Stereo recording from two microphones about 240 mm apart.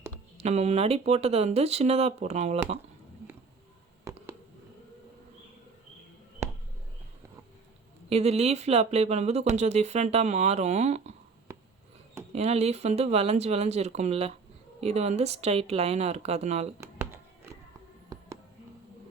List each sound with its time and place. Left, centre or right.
0.3 s speech: right
8.1 s speech: right
12.3 s speech: right
16.8 s music: centre